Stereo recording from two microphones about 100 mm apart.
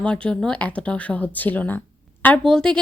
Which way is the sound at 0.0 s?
10° left (ahead or behind).